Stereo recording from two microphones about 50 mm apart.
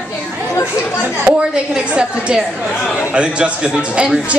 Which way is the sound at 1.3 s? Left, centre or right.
Centre.